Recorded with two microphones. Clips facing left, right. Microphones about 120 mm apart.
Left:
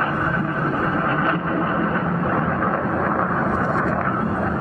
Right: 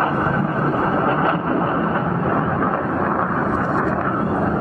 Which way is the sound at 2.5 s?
10° right (ahead or behind).